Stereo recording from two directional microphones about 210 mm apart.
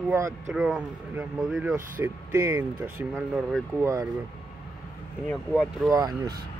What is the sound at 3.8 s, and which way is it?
Speech, 15° right (ahead or behind).